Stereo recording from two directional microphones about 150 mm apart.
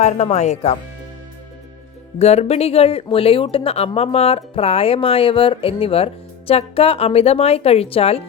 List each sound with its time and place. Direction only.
0.0 s speech: 50° left (ahead or behind)
2.1 s speech: 45° left (ahead or behind)